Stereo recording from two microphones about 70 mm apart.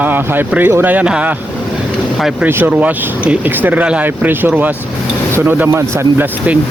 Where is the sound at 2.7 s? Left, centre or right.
Right.